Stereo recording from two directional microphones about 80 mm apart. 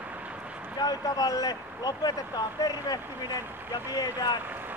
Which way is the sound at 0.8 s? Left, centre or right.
Left.